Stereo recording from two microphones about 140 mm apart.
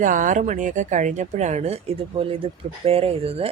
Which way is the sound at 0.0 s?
70° right (ahead or behind).